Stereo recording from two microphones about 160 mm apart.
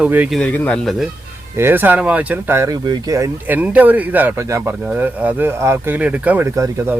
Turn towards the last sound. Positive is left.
turn(degrees=-15)  # may be behind; listen again after turning